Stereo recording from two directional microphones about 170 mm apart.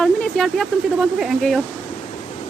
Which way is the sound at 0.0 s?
Centre (ahead or behind).